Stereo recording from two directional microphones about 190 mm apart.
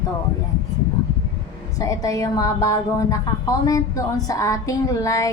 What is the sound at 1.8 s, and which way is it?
Speech, 20° left (ahead or behind).